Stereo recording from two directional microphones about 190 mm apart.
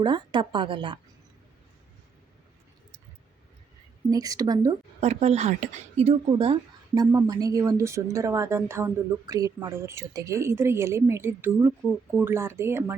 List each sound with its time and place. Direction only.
0.0 s a woman's voice: 25° right (ahead or behind)
4.1 s a woman's voice: 20° right (ahead or behind)
4.9 s speech: 35° right (ahead or behind); by 12.8 s 15° right (ahead or behind)